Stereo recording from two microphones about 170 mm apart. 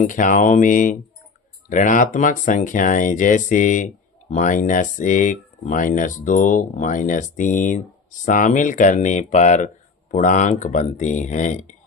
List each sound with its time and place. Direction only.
0.0 s speech: 50° left (ahead or behind)